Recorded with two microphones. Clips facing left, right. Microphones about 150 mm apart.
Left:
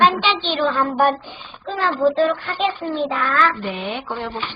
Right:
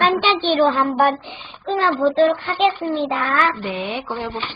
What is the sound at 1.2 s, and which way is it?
A child's voice, 25° right (ahead or behind).